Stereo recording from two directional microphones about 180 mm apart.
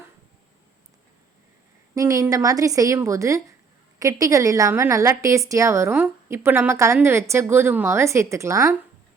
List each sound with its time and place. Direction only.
2.0 s a woman's voice: 15° right (ahead or behind)